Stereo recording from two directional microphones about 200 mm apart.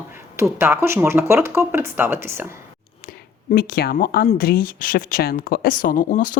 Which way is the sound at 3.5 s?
50° left (ahead or behind).